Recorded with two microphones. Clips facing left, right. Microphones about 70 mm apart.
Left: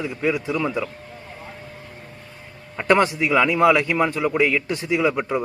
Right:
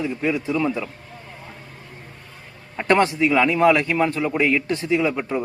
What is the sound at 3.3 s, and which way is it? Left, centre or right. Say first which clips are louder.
Speech: left 1 dB; centre.